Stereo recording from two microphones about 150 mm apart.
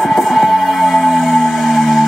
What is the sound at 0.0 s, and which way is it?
Music, centre (ahead or behind).